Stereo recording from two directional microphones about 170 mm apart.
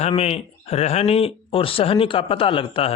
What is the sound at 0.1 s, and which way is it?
Speech, 35° left (ahead or behind).